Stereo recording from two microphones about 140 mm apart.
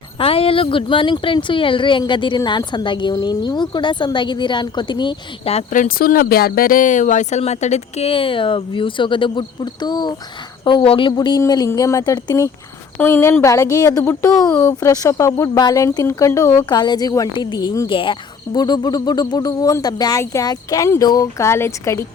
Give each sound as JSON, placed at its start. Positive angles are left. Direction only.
{"t": 0.2, "sound": "speech", "side_deg": 40}
{"t": 5.7, "sound": "a woman's voice", "side_deg": 70}
{"t": 14.5, "sound": "a woman's voice", "side_deg": 15}
{"t": 16.6, "sound": "a woman's voice", "side_deg": 30}